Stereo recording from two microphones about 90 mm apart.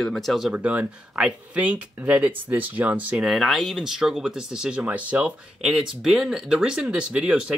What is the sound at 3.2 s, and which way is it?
Speech, centre (ahead or behind).